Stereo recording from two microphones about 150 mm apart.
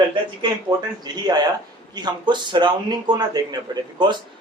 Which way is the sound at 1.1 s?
30° right (ahead or behind).